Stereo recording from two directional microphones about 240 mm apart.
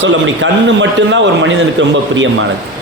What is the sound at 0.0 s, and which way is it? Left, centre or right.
A man's voice, right.